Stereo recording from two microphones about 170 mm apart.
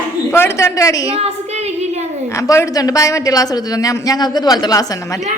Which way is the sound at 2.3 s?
15° left (ahead or behind).